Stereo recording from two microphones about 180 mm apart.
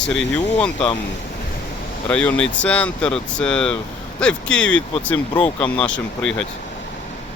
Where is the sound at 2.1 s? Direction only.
5° left (ahead or behind).